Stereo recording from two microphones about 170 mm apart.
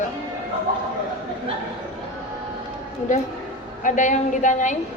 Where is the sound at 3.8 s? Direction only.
45° left (ahead or behind).